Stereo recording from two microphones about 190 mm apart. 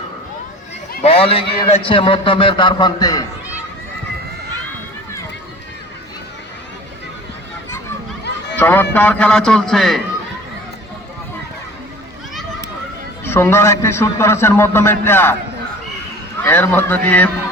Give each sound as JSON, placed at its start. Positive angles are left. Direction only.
{"t": 1.0, "sound": "a man's voice", "side_deg": 30}
{"t": 8.5, "sound": "a man's voice", "side_deg": 10}
{"t": 13.2, "sound": "a man's voice", "side_deg": 15}
{"t": 16.4, "sound": "a man's voice", "side_deg": 10}